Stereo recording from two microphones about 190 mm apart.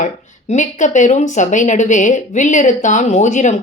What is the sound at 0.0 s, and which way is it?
Speech, 40° left (ahead or behind).